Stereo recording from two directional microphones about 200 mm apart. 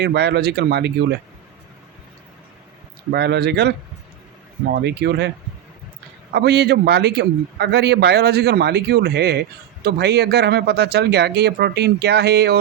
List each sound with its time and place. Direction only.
0.0 s a man's voice: 55° right (ahead or behind)
3.1 s a man's voice: 55° right (ahead or behind)
6.3 s a man's voice: 55° right (ahead or behind)